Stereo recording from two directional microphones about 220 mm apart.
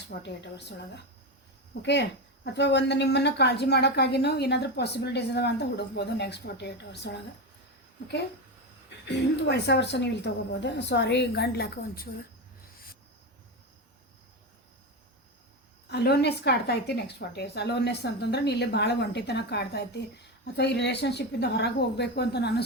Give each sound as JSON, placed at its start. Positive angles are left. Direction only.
{"t": 0.1, "sound": "a woman's voice", "side_deg": 50}
{"t": 1.8, "sound": "a woman's voice", "side_deg": 50}
{"t": 9.0, "sound": "a woman's voice", "side_deg": 50}
{"t": 15.9, "sound": "a woman's voice", "side_deg": 45}